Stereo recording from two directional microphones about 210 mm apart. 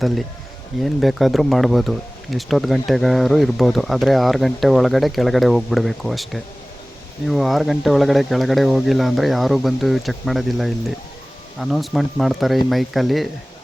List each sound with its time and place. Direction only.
0.9 s speech: centre (ahead or behind)